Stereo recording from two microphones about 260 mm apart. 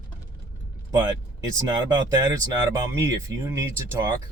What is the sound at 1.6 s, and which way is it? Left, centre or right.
Speech, centre.